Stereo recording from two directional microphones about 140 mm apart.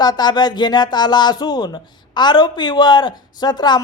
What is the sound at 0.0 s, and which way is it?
A man's voice, 30° left (ahead or behind).